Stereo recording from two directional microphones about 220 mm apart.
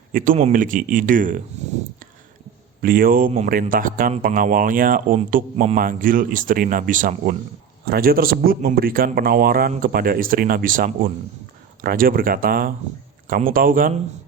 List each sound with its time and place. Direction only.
0.1 s speech: 40° right (ahead or behind)
2.8 s speech: 40° right (ahead or behind)